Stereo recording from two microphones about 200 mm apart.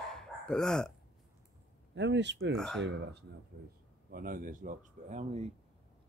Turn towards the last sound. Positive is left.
turn(degrees=-35)  # may be behind; listen again after turning